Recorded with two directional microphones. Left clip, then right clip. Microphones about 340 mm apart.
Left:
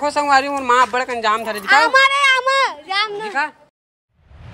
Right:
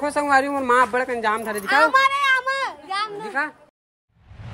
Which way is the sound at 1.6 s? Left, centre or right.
Left.